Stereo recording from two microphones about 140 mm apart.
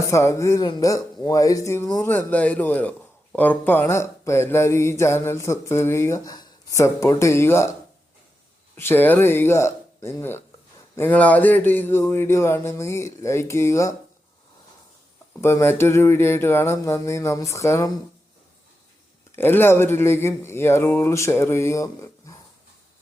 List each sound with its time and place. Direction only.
0.1 s speech: 20° left (ahead or behind)
8.7 s speech: 15° left (ahead or behind)
15.3 s speech: 20° left (ahead or behind)
19.4 s speech: 15° left (ahead or behind)